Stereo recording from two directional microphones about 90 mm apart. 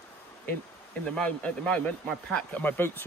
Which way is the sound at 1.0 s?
10° left (ahead or behind).